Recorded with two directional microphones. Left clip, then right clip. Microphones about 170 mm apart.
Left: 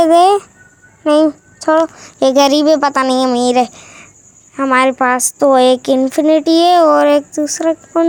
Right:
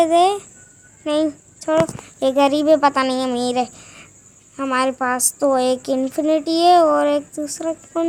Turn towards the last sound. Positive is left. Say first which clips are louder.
# left 9 dB
turn(degrees=35)  # may be behind; listen again after turning